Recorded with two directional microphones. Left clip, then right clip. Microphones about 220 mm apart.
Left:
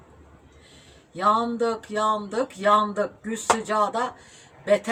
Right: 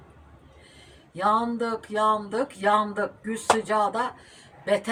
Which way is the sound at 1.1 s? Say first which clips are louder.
Left 2 dB; 20° left (ahead or behind).